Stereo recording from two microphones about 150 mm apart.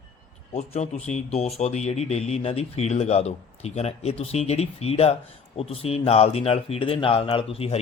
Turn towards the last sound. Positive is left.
turn(degrees=40)  # may be behind; listen again after turning